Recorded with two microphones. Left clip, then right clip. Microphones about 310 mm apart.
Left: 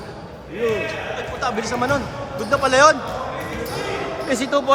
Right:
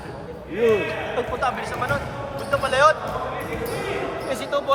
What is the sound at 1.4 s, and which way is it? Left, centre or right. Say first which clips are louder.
Speech: left 1 dB; centre.